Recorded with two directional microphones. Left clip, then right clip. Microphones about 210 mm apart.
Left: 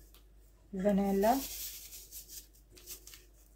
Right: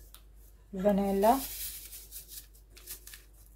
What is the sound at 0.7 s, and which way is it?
Speech, 10° right (ahead or behind).